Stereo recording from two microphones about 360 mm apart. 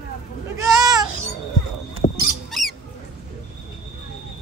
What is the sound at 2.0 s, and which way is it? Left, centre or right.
Rodents, centre.